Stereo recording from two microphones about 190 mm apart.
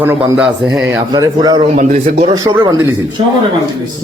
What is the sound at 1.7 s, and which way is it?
Speech, 40° right (ahead or behind).